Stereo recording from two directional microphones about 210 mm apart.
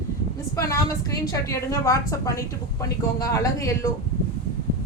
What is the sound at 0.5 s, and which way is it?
A woman's voice, 15° left (ahead or behind).